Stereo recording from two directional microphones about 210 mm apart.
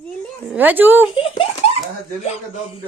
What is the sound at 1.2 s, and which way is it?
Speech, 25° left (ahead or behind).